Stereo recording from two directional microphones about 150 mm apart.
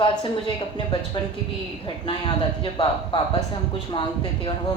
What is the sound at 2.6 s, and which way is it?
Speech, 35° left (ahead or behind).